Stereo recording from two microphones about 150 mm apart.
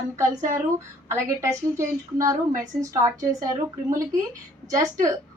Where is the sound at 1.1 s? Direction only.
20° right (ahead or behind).